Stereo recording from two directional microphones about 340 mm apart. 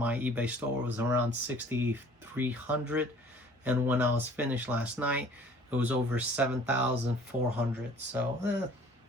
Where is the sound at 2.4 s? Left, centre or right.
Centre.